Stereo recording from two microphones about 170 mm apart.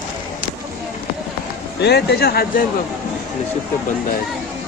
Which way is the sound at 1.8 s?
75° left (ahead or behind).